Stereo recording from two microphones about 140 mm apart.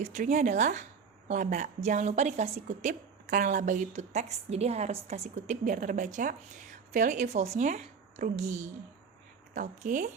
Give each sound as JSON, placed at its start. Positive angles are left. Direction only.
{"t": 0.0, "sound": "a woman's voice", "side_deg": -55}